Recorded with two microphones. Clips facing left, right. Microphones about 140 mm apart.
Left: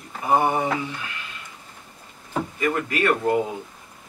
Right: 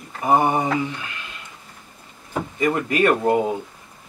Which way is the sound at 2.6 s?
20° right (ahead or behind).